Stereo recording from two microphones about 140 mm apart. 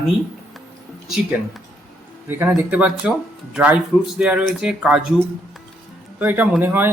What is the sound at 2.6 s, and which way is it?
Speech, 10° right (ahead or behind).